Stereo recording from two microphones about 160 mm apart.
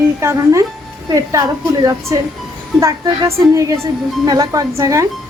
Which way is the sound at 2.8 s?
20° right (ahead or behind).